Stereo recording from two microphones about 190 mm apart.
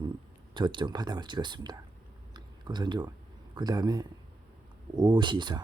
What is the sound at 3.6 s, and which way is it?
Speech, 20° right (ahead or behind).